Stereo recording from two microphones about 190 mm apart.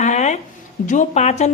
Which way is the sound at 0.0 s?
40° left (ahead or behind).